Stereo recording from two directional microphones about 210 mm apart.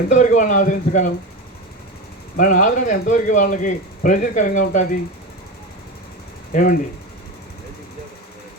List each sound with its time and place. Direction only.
0.1 s speech: 35° left (ahead or behind)
2.3 s speech: 40° left (ahead or behind)
6.5 s speech: 40° left (ahead or behind)